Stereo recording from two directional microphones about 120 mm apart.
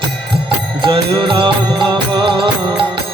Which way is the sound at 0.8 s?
40° right (ahead or behind).